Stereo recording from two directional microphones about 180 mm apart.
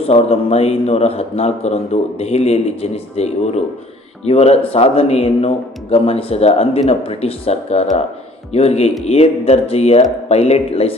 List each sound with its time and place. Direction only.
0.0 s speech: 35° left (ahead or behind)